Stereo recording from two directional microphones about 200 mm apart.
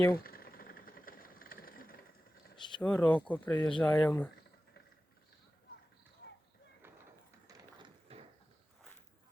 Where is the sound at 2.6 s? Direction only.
25° left (ahead or behind).